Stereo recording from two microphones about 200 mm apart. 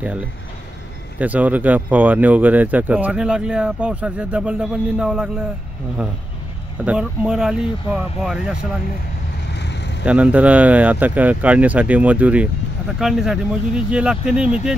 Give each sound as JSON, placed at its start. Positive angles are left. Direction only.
{"t": 1.2, "sound": "speech", "side_deg": -10}
{"t": 6.8, "sound": "speech", "side_deg": -5}
{"t": 9.5, "sound": "vehicle", "side_deg": 60}
{"t": 10.0, "sound": "speech", "side_deg": -5}